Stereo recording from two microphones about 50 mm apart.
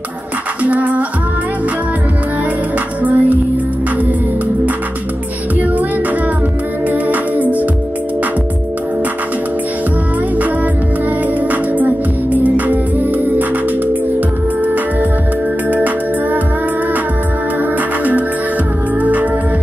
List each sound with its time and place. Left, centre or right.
0.7 s music: right
3.0 s music: right
6.9 s music: right
11.5 s music: right
14.6 s music: right
18.9 s music: right